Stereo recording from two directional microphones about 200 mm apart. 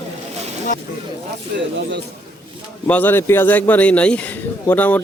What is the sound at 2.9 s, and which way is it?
A man's voice, 10° left (ahead or behind).